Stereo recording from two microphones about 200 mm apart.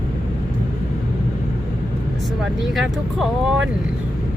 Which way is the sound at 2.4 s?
Centre (ahead or behind).